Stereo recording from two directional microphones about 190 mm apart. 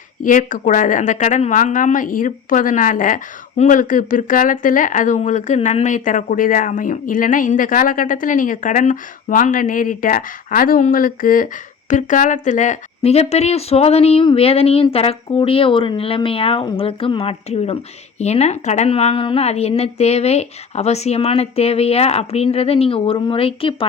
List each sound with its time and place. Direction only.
0.2 s speech: 45° left (ahead or behind)